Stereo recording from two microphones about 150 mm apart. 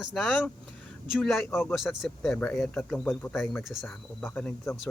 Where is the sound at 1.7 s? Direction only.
Centre (ahead or behind).